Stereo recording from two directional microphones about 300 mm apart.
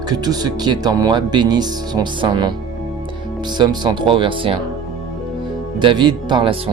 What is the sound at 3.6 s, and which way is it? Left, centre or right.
Speech, centre.